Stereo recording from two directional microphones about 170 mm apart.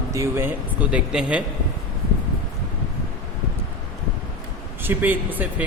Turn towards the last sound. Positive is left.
turn(degrees=-10)  # may be behind; listen again after turning